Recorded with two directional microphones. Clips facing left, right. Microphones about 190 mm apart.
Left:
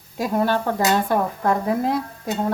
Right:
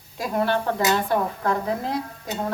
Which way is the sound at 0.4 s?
45° left (ahead or behind).